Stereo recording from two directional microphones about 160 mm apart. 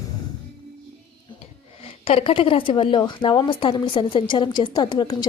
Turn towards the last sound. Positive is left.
turn(degrees=25)  # may be behind; listen again after turning